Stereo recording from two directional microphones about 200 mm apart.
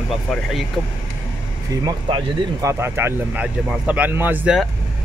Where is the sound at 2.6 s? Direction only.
10° right (ahead or behind).